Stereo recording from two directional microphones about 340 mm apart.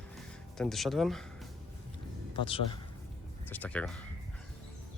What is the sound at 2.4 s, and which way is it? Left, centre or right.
Speech, centre.